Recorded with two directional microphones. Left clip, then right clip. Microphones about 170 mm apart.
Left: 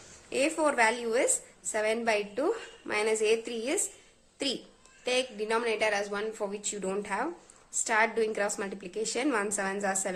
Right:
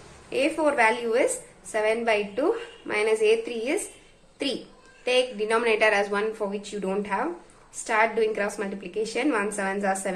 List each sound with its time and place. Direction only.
0.3 s a woman's voice: 30° left (ahead or behind)